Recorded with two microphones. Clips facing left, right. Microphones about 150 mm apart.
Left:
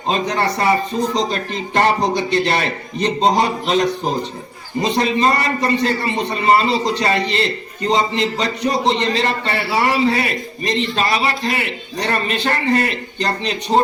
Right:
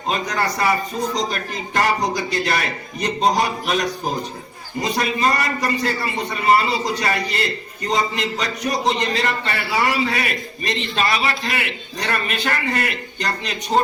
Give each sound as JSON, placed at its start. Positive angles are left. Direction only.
{"t": 0.1, "sound": "a man's voice", "side_deg": 25}